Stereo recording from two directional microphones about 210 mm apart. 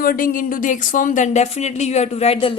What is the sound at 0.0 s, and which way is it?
A woman's voice, 45° left (ahead or behind).